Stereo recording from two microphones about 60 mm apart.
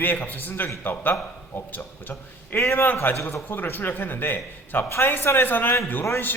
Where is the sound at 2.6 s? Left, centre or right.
Left.